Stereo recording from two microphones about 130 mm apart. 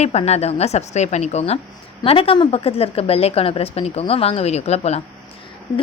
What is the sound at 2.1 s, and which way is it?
A woman's voice, 45° left (ahead or behind).